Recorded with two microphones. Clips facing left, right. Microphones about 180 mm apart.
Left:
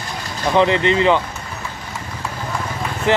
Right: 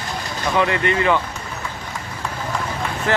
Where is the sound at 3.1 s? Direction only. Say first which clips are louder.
Left 3 dB; 20° left (ahead or behind).